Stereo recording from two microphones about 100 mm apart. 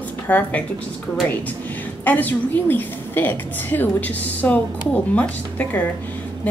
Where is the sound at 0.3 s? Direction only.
15° left (ahead or behind).